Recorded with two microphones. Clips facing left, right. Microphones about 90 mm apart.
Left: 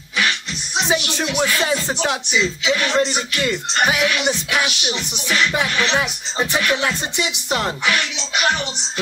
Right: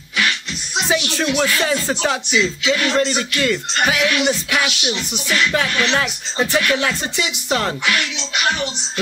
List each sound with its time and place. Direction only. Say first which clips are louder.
1.1 s music: right 2 dB; 15° left (ahead or behind)
6.4 s music: right 2 dB; 15° left (ahead or behind)